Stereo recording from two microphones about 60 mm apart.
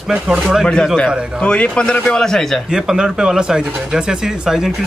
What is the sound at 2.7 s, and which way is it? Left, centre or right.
Speech, centre.